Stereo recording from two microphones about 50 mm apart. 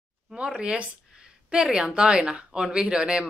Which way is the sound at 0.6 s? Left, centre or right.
Centre.